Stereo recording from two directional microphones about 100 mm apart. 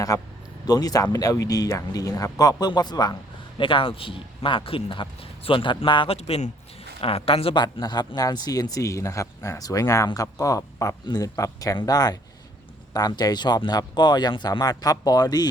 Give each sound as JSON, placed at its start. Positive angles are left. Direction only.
{"t": 0.1, "sound": "speech", "side_deg": 35}
{"t": 3.6, "sound": "a man's voice", "side_deg": 60}
{"t": 6.1, "sound": "speech", "side_deg": 85}
{"t": 7.0, "sound": "a woman's voice", "side_deg": 70}
{"t": 7.6, "sound": "speech", "side_deg": 45}